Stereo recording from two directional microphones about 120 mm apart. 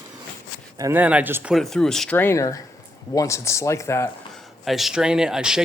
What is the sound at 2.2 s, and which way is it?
Speech, 20° left (ahead or behind).